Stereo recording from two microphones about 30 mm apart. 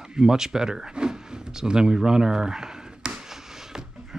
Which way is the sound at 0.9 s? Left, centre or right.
Right.